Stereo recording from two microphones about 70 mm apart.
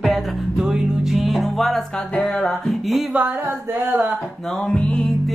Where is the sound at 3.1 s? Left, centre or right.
Right.